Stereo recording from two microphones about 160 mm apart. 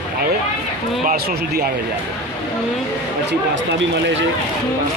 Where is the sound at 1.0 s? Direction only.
55° right (ahead or behind).